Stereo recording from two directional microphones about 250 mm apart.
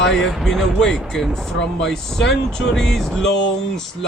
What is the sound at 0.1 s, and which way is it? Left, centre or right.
Speech, centre.